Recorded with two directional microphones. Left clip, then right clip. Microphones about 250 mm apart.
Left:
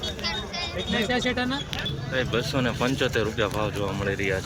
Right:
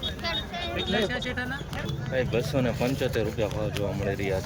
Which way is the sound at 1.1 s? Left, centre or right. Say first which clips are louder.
Left 6 dB; left.